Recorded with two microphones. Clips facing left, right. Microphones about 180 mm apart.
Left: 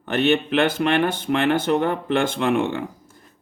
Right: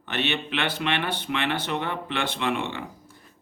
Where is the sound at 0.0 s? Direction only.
45° left (ahead or behind).